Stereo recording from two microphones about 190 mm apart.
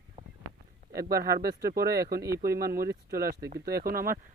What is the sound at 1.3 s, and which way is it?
Speech, 55° right (ahead or behind).